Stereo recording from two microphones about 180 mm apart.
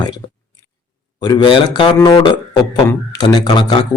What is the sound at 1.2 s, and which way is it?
A man's voice, 25° left (ahead or behind).